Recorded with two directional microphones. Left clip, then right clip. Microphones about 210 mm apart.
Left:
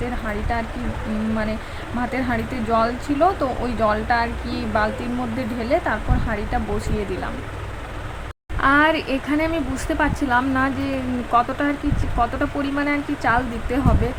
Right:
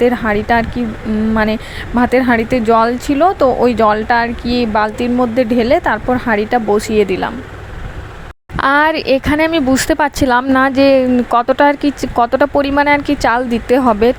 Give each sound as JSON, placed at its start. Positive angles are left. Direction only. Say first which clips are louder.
{"t": 0.0, "sound": "speech", "louder": "right 14 dB", "side_deg": -35}
{"t": 2.0, "sound": "speech", "louder": "right 12 dB", "side_deg": -35}
{"t": 8.6, "sound": "speech", "louder": "right 5 dB", "side_deg": -40}